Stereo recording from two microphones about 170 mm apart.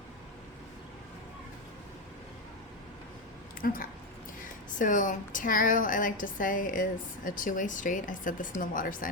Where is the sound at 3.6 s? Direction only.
55° left (ahead or behind).